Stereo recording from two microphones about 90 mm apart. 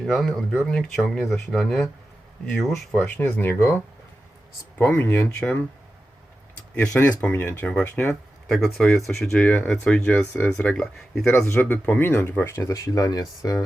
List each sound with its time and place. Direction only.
0.0 s speech: 5° left (ahead or behind); by 3.8 s 25° left (ahead or behind)
4.9 s speech: 20° left (ahead or behind)
6.7 s speech: 15° left (ahead or behind)
7.7 s speech: 10° left (ahead or behind)
11.3 s speech: 30° left (ahead or behind)
12.5 s speech: 35° left (ahead or behind)